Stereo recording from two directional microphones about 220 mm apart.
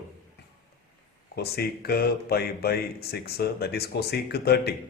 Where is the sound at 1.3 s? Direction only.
45° left (ahead or behind).